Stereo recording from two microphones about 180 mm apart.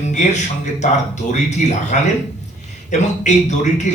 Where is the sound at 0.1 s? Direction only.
40° left (ahead or behind).